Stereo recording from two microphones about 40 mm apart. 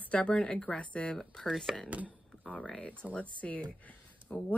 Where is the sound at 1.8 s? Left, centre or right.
Right.